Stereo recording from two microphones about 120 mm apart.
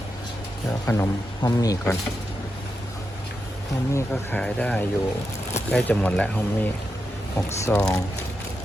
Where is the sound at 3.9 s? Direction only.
15° left (ahead or behind).